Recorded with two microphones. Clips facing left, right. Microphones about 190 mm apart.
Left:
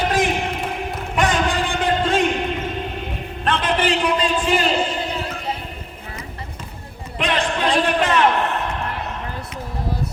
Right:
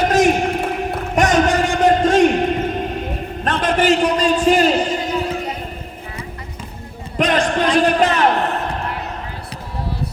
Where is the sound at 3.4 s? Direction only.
45° right (ahead or behind).